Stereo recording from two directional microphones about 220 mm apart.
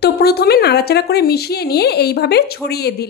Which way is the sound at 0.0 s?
45° left (ahead or behind).